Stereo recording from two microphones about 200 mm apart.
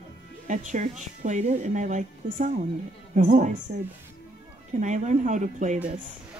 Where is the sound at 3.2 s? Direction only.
40° right (ahead or behind).